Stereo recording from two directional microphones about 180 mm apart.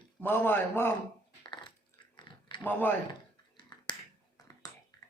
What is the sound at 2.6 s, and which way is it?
Speech, 10° left (ahead or behind).